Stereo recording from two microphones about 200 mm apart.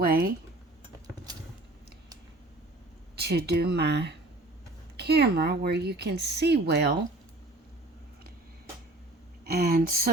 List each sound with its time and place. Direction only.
0.0 s speech: 50° right (ahead or behind)
3.2 s speech: 55° right (ahead or behind)
9.4 s speech: 50° right (ahead or behind)